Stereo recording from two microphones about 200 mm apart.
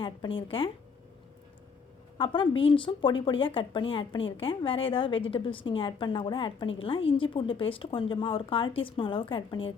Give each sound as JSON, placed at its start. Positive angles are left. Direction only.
{"t": 0.0, "sound": "a woman's voice", "side_deg": 25}
{"t": 2.1, "sound": "a woman's voice", "side_deg": 25}